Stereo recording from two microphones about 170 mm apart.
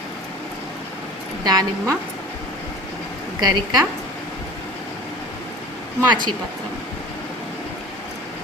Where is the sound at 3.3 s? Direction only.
25° right (ahead or behind).